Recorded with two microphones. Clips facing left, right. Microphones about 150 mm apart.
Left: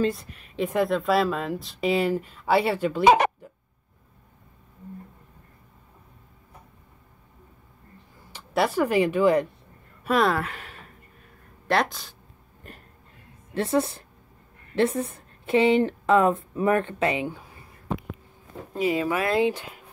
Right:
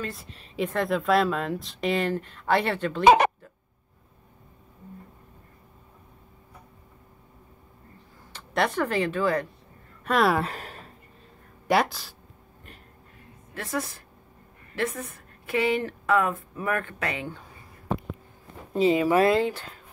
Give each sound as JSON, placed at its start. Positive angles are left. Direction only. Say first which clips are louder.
{"t": 0.8, "sound": "speech", "louder": "right 3 dB", "side_deg": 0}
{"t": 8.3, "sound": "speech", "louder": "left 2 dB", "side_deg": 10}
{"t": 10.0, "sound": "speech", "louder": "left 1 dB", "side_deg": 0}
{"t": 10.4, "sound": "a sound", "louder": "right 3 dB", "side_deg": -40}
{"t": 11.6, "sound": "speech", "louder": "right 1 dB", "side_deg": -10}
{"t": 13.6, "sound": "a woman's voice", "louder": "left 8 dB", "side_deg": 30}
{"t": 18.8, "sound": "speech", "louder": "right 4 dB", "side_deg": -25}
{"t": 19.4, "sound": "speech", "louder": "left 4 dB", "side_deg": 15}